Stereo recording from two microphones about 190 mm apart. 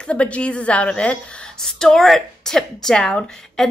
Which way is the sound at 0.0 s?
5° left (ahead or behind).